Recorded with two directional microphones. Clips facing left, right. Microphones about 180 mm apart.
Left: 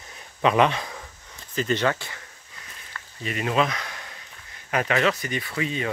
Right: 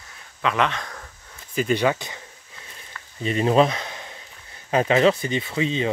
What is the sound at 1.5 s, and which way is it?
Speech, 10° right (ahead or behind).